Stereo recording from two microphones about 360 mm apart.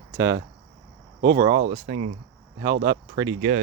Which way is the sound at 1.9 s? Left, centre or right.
Right.